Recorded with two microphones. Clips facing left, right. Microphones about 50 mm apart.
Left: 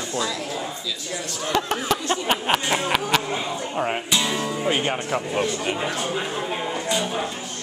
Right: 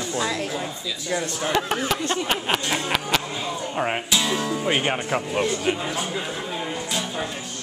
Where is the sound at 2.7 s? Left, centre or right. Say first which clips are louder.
Left 2 dB; centre.